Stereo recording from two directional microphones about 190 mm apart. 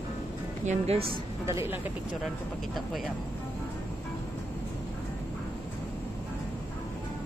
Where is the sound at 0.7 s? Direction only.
35° right (ahead or behind).